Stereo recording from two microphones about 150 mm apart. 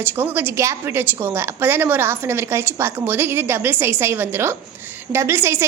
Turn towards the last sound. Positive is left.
turn(degrees=-15)  # may be behind; listen again after turning